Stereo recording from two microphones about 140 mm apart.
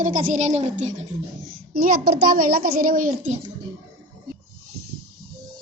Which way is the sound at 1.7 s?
90° right.